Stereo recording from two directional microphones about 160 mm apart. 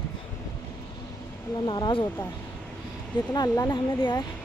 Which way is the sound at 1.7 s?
30° left (ahead or behind).